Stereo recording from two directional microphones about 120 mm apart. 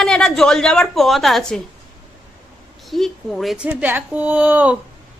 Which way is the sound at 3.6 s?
15° right (ahead or behind).